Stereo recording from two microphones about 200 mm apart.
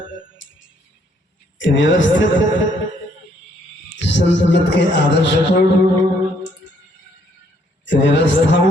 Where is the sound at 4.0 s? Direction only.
60° left (ahead or behind).